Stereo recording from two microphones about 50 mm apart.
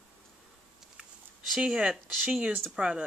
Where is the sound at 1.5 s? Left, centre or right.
Right.